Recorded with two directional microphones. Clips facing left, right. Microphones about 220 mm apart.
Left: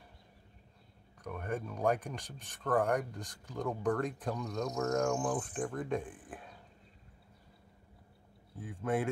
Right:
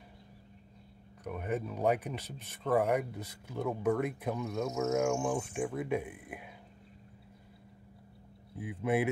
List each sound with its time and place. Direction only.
1.3 s speech: 10° right (ahead or behind)
8.5 s speech: 15° right (ahead or behind)